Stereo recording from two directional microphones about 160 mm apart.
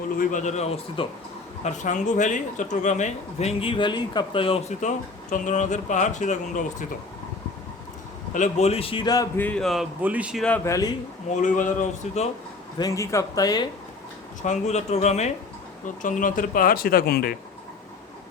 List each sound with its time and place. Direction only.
0.2 s speech: 55° left (ahead or behind)
8.3 s a man's voice: 45° left (ahead or behind); by 9.3 s 25° left (ahead or behind)
9.4 s a man's voice: 5° left (ahead or behind)
10.0 s a man's voice: 10° right (ahead or behind)
10.7 s speech: 20° left (ahead or behind)
11.3 s speech: 55° left (ahead or behind)
12.8 s speech: 20° left (ahead or behind)
14.4 s speech: 45° left (ahead or behind); by 17.3 s 70° left (ahead or behind)